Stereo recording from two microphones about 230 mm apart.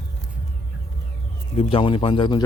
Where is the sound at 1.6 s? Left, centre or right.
Left.